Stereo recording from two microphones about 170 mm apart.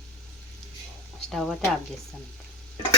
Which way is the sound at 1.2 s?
Centre (ahead or behind).